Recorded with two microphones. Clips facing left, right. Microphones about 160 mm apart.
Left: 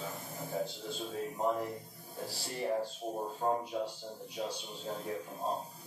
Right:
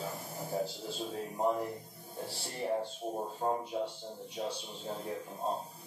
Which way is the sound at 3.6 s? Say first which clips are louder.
Right 1 dB; 25° right (ahead or behind).